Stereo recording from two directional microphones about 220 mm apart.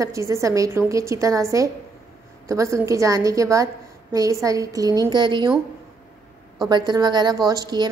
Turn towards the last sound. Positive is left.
turn(degrees=-20)  # may be behind; listen again after turning